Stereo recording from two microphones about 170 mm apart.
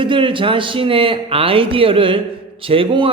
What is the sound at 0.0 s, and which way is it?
A man's voice, 30° right (ahead or behind).